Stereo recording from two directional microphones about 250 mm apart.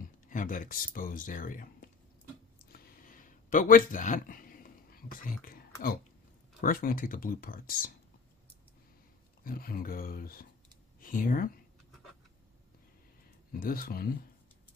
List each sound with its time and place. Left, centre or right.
0.3 s speech: left
2.7 s a sound: left
6.6 s speech: left
9.4 s speech: left
13.5 s speech: left